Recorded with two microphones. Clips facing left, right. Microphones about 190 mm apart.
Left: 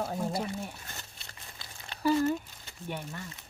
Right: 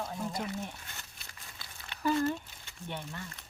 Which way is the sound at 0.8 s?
35° left (ahead or behind).